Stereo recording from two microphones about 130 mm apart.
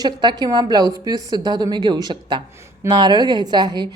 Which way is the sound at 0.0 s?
35° right (ahead or behind).